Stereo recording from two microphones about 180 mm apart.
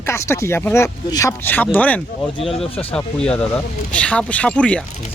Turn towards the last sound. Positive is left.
turn(degrees=5)  # may be behind; listen again after turning